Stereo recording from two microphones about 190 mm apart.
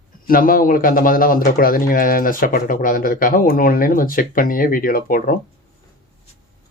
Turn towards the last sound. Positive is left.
turn(degrees=50)  # may be behind; listen again after turning